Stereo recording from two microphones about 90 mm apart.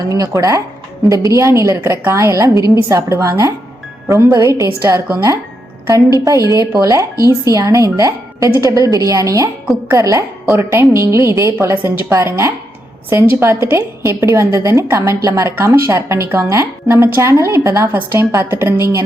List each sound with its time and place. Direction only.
0.1 s a woman's voice: 40° right (ahead or behind)
6.1 s a woman's voice: 40° right (ahead or behind); by 12.1 s 20° right (ahead or behind)
12.1 s a woman's voice: 30° right (ahead or behind)